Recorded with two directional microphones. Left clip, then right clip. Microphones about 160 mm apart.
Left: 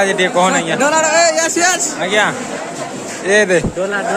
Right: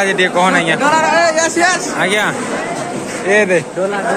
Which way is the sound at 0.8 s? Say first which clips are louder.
Left 2 dB; 90° left.